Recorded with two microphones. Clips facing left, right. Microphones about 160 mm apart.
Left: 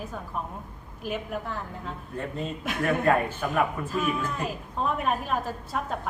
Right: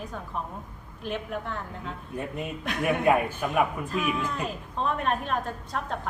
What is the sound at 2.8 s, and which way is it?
Speech, 15° right (ahead or behind).